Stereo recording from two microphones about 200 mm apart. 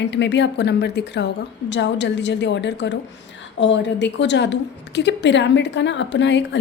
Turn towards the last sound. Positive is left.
turn(degrees=65)  # may be behind; listen again after turning